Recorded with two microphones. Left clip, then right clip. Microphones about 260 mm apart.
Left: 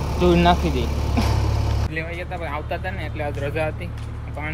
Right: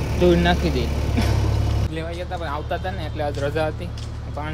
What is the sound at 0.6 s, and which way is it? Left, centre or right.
Speech, centre.